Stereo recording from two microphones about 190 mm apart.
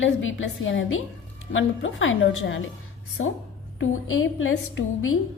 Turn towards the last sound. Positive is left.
turn(degrees=90)